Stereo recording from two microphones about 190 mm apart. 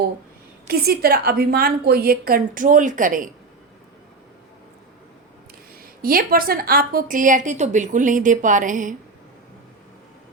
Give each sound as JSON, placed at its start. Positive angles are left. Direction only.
{"t": 0.7, "sound": "a woman's voice", "side_deg": -55}
{"t": 5.8, "sound": "a woman's voice", "side_deg": -50}